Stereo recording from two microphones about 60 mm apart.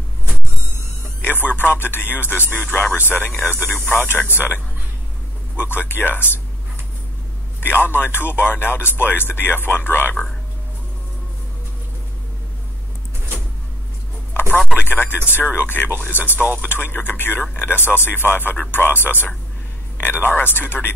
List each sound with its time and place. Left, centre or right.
1.2 s speech: left
5.7 s speech: left
7.6 s speech: left
14.9 s speech: left